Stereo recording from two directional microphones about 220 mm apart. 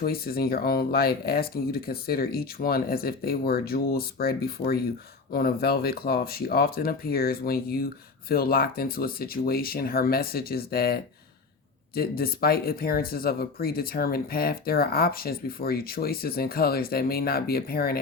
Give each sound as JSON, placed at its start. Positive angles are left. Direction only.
{"t": 0.0, "sound": "speech", "side_deg": 45}